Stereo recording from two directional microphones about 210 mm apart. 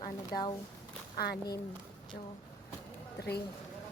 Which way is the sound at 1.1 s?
45° left (ahead or behind).